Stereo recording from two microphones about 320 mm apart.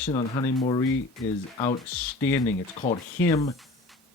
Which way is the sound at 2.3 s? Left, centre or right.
Centre.